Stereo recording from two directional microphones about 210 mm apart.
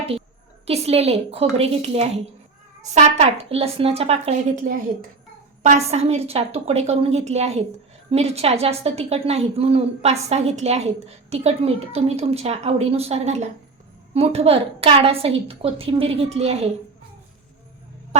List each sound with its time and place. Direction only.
0.7 s a woman's voice: 30° right (ahead or behind)